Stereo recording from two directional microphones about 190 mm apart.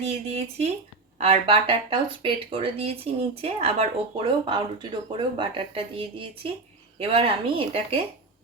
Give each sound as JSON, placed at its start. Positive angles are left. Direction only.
{"t": 0.0, "sound": "speech", "side_deg": -35}